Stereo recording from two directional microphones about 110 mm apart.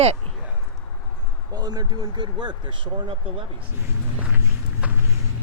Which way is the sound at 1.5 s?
35° right (ahead or behind).